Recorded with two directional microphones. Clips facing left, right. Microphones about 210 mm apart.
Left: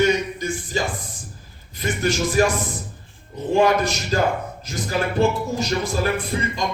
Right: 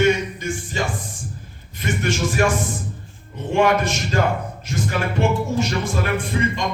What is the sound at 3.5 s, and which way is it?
A man's voice, 35° left (ahead or behind).